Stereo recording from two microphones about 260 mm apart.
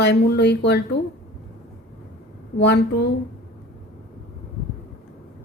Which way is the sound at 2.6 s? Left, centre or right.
Left.